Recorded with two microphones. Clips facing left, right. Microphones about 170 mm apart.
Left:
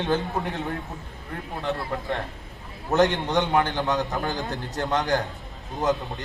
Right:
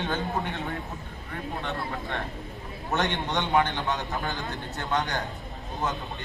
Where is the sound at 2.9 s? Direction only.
40° left (ahead or behind).